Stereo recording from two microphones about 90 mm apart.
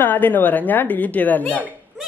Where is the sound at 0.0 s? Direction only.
20° left (ahead or behind).